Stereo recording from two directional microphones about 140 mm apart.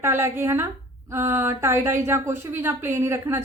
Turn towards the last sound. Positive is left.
turn(degrees=-20)  # may be behind; listen again after turning